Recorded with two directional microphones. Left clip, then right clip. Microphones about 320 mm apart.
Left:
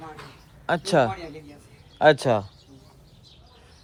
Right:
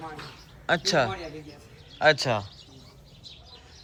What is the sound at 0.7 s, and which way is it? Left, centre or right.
A man's voice, centre.